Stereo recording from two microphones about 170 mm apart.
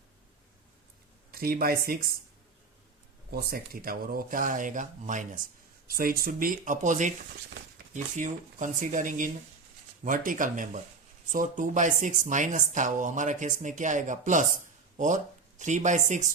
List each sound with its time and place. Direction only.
1.3 s speech: 60° right (ahead or behind)
3.3 s speech: 65° right (ahead or behind)
5.9 s speech: 60° right (ahead or behind)